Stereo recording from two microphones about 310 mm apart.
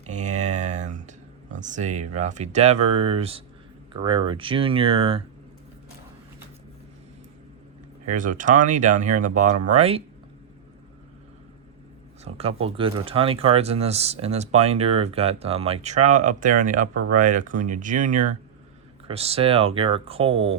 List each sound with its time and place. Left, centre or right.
0.0 s a sound: right
1.5 s speech: right
8.1 s speech: right
12.2 s speech: centre
16.9 s speech: right
17.2 s speech: right